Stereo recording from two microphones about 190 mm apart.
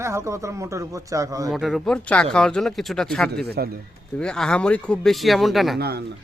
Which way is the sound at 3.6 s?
55° right (ahead or behind).